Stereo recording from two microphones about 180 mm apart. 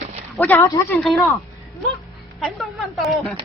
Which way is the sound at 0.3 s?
10° left (ahead or behind).